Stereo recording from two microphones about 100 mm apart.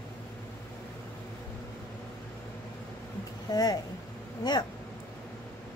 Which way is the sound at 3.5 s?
40° left (ahead or behind).